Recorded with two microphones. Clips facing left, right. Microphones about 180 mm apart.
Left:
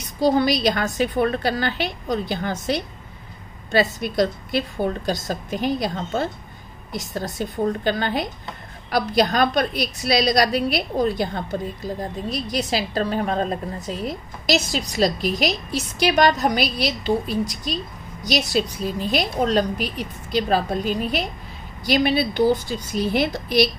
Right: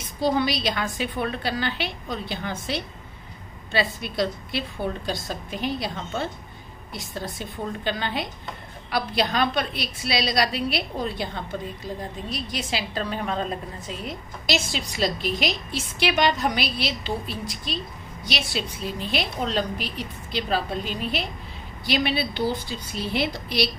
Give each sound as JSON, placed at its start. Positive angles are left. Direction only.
{"t": 0.2, "sound": "a woman's voice", "side_deg": 40}
{"t": 4.0, "sound": "a woman's voice", "side_deg": 40}